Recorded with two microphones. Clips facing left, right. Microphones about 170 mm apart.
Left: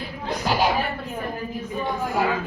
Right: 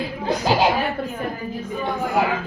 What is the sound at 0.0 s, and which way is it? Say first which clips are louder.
Music: right 5 dB; 90° right.